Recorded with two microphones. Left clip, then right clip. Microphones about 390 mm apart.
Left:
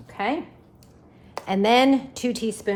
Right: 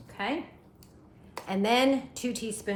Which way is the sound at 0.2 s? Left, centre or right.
Centre.